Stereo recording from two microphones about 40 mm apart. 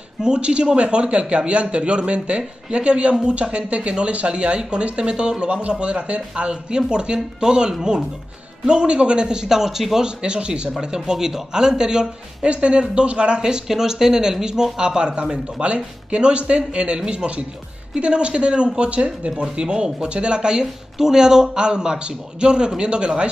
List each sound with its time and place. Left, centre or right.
0.2 s a man's voice: right
10.0 s a man's voice: right
11.1 s a man's voice: centre
12.4 s a man's voice: right